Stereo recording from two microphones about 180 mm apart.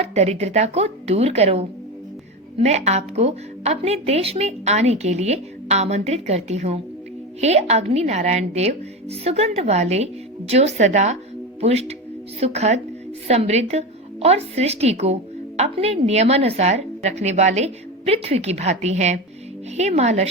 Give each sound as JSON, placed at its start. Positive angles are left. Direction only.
{"t": 0.0, "sound": "a woman's voice", "side_deg": -35}